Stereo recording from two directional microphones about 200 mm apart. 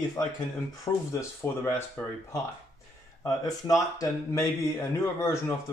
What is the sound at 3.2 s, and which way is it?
Speech, 15° left (ahead or behind).